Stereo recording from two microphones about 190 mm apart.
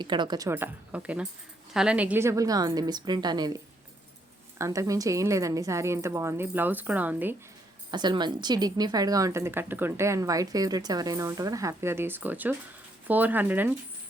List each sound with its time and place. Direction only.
0.0 s a woman's voice: 25° right (ahead or behind)
7.9 s a woman's voice: 25° right (ahead or behind)